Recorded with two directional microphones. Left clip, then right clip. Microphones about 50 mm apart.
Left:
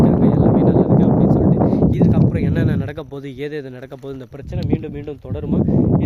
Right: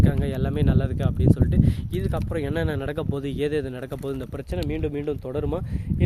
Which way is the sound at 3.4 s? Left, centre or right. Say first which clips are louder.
Right 1 dB; centre.